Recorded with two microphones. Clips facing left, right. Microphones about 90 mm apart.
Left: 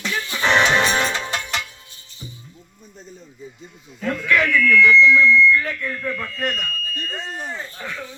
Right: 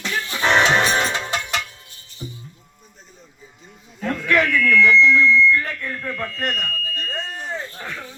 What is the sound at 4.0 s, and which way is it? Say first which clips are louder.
Speech: even; 30° right (ahead or behind).